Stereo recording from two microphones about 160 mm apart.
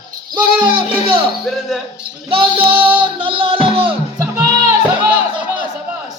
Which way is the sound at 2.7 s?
10° right (ahead or behind).